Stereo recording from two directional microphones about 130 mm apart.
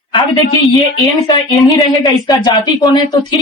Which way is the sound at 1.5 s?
Centre (ahead or behind).